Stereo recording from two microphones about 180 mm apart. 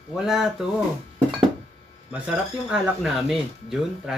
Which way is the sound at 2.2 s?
5° right (ahead or behind).